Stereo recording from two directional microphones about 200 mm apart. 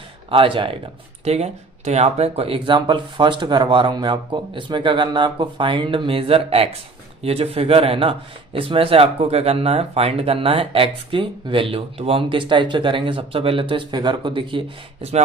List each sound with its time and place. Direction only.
0.3 s speech: 25° right (ahead or behind)